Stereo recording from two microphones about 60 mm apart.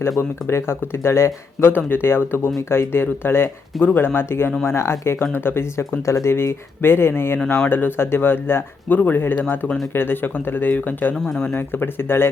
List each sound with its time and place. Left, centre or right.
0.2 s speech: left
1.7 s speech: left